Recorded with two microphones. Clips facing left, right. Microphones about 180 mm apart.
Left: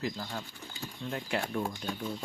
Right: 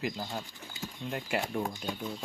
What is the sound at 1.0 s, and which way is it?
Speech, 5° right (ahead or behind).